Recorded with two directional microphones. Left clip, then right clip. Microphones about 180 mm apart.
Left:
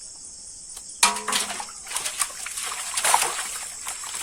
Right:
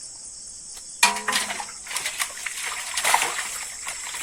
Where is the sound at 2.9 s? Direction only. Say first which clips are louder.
Even; 20° left (ahead or behind).